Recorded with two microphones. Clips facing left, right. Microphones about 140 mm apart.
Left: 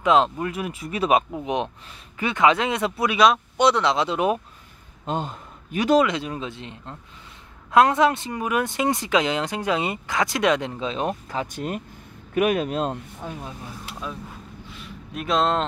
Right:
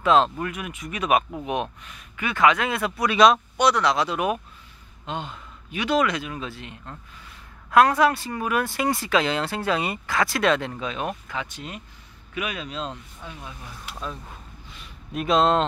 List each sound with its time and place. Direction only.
0.0 s speech: 15° left (ahead or behind)
0.5 s speech: 30° left (ahead or behind)
3.1 s speech: 5° left (ahead or behind)
3.5 s speech: 25° left (ahead or behind)
5.0 s a man's voice: 40° left (ahead or behind)
5.9 s speech: 25° left (ahead or behind)
14.7 s a sound: centre (ahead or behind)